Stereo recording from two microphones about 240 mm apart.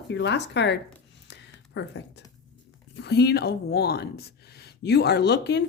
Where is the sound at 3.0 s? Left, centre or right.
Left.